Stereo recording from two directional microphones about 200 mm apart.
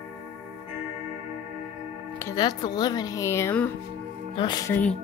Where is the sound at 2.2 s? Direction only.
20° left (ahead or behind).